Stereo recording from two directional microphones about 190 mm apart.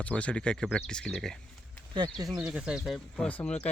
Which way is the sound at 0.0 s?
5° left (ahead or behind).